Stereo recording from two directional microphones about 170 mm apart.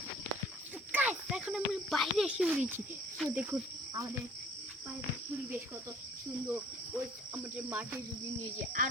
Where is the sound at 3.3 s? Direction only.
10° right (ahead or behind).